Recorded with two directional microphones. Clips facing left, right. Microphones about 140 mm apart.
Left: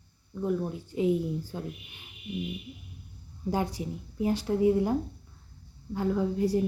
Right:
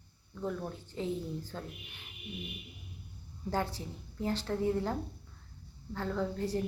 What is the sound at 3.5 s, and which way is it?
Speech, 15° left (ahead or behind).